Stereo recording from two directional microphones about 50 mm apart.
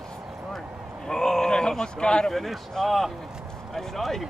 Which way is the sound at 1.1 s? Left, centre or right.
Centre.